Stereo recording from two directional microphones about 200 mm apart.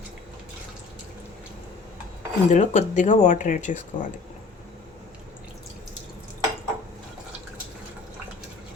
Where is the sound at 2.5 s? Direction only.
35° left (ahead or behind).